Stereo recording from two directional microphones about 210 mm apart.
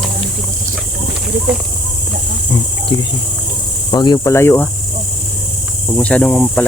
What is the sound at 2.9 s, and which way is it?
Speech, 25° left (ahead or behind).